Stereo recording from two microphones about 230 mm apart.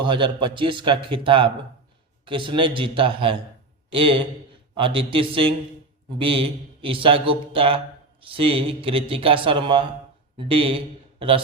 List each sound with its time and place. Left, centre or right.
0.0 s a man's voice: right